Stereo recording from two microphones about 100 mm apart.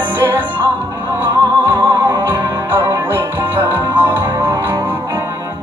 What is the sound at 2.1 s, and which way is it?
Music, 20° right (ahead or behind).